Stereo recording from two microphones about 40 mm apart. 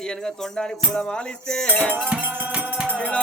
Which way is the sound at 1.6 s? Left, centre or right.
Left.